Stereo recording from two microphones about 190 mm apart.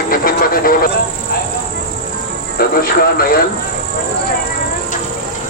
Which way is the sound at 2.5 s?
50° left (ahead or behind).